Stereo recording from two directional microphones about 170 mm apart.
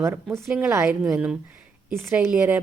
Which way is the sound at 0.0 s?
15° right (ahead or behind).